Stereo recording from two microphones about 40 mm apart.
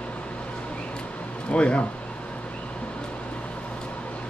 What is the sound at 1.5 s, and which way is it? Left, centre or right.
Speech, left.